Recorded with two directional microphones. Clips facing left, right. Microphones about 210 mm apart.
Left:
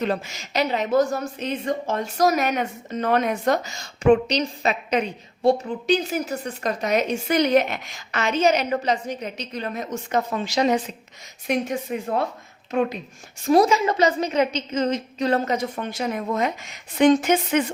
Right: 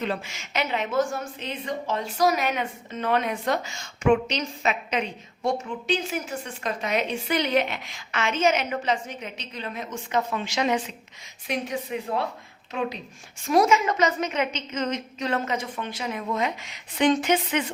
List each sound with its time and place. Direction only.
0.0 s a woman's voice: 40° left (ahead or behind)
11.4 s a woman's voice: 45° left (ahead or behind)
13.4 s a woman's voice: 35° left (ahead or behind)